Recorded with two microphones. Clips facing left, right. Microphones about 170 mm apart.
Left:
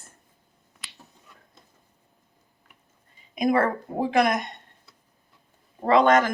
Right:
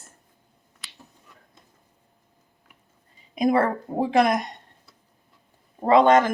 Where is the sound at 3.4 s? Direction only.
30° right (ahead or behind).